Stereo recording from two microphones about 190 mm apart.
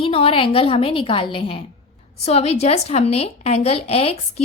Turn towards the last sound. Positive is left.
turn(degrees=30)  # may be behind; listen again after turning